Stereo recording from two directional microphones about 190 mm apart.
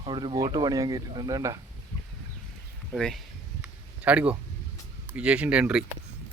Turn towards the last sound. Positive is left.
turn(degrees=-5)  # may be behind; listen again after turning